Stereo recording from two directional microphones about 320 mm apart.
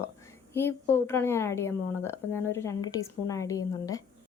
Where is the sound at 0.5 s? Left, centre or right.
Centre.